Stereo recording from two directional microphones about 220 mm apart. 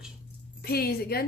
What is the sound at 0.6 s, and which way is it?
Speech, 45° left (ahead or behind).